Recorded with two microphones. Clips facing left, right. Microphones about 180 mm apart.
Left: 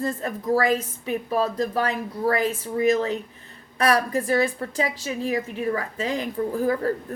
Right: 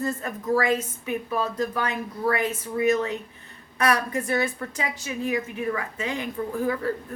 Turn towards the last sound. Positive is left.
turn(degrees=40)  # may be behind; listen again after turning